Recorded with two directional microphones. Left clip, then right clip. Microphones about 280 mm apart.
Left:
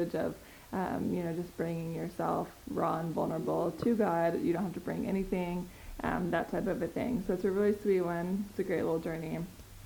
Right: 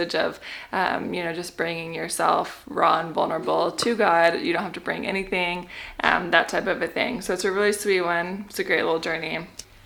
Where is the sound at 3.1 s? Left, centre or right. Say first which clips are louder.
Right 10 dB; centre.